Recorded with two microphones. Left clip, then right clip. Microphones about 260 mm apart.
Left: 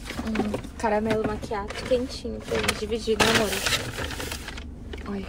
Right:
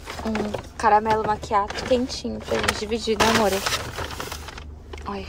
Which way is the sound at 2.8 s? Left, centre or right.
Right.